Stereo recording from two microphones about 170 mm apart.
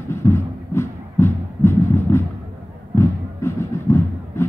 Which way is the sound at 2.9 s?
15° left (ahead or behind).